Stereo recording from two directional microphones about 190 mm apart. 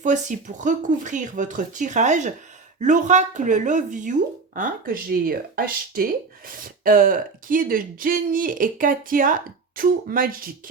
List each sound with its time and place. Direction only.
0.0 s speech: 40° right (ahead or behind)